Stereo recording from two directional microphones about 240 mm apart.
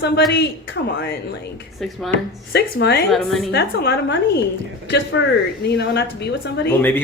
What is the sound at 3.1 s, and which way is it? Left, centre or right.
Speech, centre.